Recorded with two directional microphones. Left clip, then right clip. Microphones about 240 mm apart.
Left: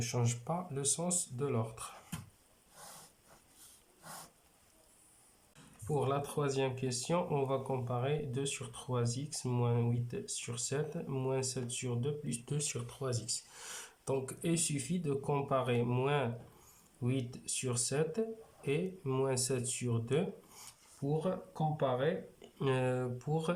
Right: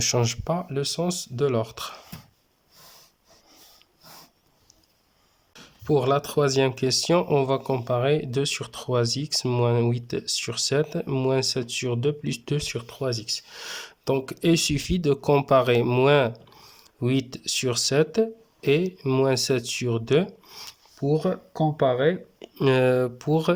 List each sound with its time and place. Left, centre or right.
0.0 s speech: right
5.5 s speech: right